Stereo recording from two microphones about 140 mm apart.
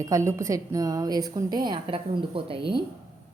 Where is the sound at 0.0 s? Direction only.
20° right (ahead or behind); by 2.8 s 40° right (ahead or behind).